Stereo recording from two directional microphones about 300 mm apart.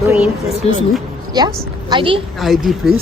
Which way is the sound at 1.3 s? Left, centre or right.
Centre.